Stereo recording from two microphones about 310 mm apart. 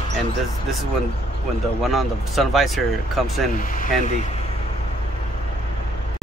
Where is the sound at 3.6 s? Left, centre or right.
Left.